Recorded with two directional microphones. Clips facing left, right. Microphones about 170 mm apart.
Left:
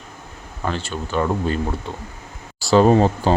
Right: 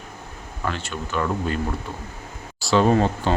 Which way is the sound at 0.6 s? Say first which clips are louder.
Left 3 dB; 30° left (ahead or behind).